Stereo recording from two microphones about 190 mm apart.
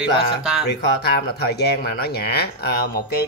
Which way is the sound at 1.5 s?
60° left (ahead or behind).